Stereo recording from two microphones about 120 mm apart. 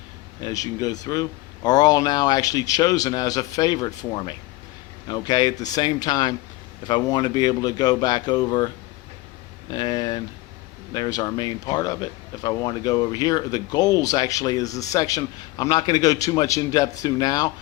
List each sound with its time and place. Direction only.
0.4 s speech: 30° left (ahead or behind)